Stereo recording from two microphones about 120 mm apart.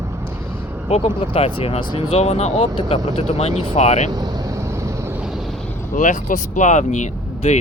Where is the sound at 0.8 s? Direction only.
60° left (ahead or behind).